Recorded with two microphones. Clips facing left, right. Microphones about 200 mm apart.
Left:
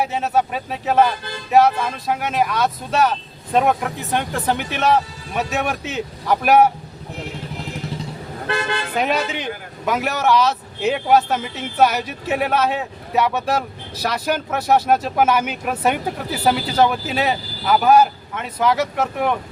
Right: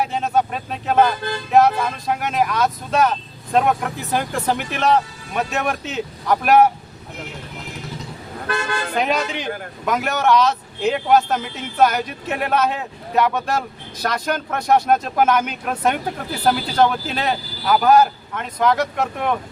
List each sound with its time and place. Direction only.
0.0 s a man's voice: 5° left (ahead or behind)
9.0 s a man's voice: centre (ahead or behind)